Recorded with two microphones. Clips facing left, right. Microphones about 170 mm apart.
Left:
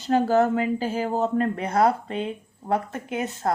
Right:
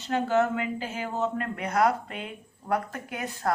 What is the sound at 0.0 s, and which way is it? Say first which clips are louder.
Speech: left 5 dB; 35° left (ahead or behind).